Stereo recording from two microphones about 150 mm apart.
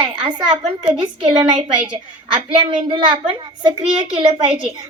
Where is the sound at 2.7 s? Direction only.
35° right (ahead or behind).